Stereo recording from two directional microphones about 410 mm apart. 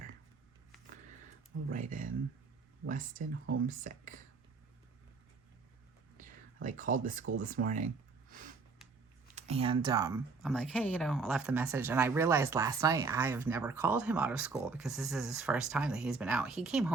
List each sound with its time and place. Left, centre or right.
1.7 s speech: centre
6.1 s speech: centre
8.3 s a sound: centre
9.3 s speech: centre